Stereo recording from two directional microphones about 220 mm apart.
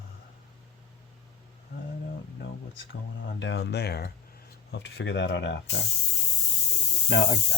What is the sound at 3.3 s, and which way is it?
Speech, 55° left (ahead or behind).